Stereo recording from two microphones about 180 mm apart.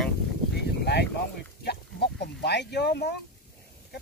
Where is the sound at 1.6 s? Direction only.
65° left (ahead or behind).